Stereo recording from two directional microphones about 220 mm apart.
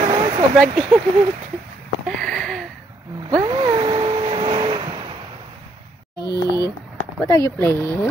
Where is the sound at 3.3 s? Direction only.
20° right (ahead or behind).